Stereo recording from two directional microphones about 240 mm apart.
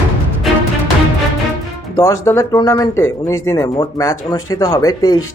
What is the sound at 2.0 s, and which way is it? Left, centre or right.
Speech, centre.